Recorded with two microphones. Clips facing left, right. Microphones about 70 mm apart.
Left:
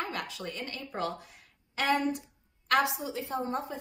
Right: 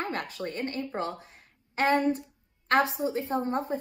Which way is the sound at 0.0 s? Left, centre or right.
Right.